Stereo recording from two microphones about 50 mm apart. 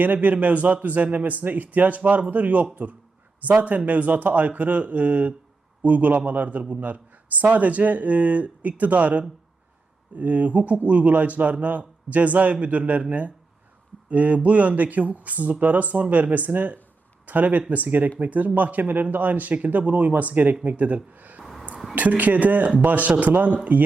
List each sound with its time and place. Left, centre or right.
0.0 s a man's voice: right
21.4 s a sound: centre
21.9 s a man's voice: right